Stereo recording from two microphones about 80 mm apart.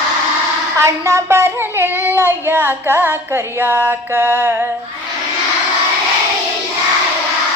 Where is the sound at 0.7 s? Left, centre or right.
Right.